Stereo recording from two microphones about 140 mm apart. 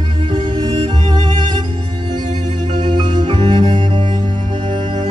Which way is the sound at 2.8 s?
30° right (ahead or behind).